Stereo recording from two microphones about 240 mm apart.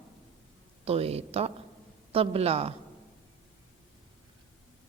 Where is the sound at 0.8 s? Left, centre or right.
Right.